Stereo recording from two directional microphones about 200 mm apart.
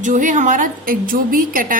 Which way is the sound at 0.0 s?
40° right (ahead or behind).